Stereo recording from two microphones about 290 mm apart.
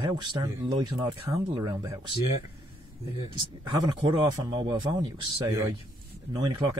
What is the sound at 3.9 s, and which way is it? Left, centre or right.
Speech, centre.